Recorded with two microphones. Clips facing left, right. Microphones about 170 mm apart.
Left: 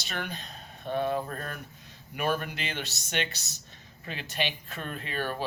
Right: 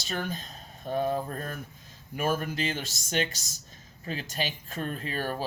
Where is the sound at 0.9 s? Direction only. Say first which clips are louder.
Right 1 dB; 40° right (ahead or behind).